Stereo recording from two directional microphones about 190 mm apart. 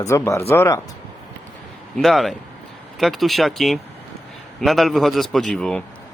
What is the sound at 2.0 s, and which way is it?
Speech, centre (ahead or behind).